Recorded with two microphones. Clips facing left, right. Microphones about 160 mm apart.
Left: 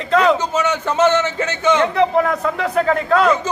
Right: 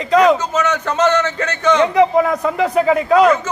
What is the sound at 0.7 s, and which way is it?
Speech, 10° left (ahead or behind).